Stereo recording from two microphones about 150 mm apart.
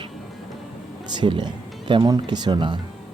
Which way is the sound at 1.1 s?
30° right (ahead or behind).